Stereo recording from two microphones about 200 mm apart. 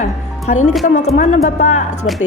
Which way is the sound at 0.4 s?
35° left (ahead or behind).